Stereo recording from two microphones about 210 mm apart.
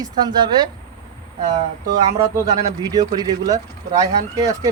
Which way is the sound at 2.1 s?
15° right (ahead or behind).